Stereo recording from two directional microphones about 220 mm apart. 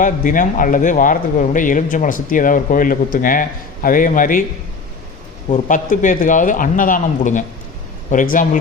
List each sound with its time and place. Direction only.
0.0 s speech: 35° left (ahead or behind)
5.5 s speech: 35° left (ahead or behind)